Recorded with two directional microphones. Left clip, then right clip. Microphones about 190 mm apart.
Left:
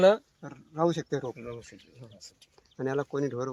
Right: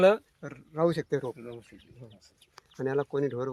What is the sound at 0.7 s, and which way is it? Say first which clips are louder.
Speech: right 1 dB; 30° right (ahead or behind).